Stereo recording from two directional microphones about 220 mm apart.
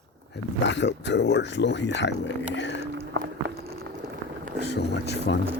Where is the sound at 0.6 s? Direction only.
55° left (ahead or behind).